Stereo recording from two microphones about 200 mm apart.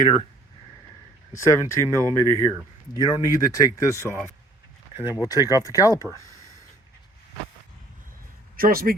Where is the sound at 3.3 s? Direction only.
15° left (ahead or behind).